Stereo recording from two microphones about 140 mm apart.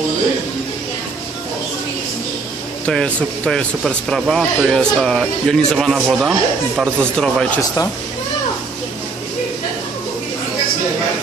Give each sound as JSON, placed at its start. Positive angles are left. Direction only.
{"t": 2.9, "sound": "a man's voice", "side_deg": 5}